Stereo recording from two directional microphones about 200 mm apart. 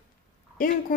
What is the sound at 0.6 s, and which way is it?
Speech, 45° left (ahead or behind).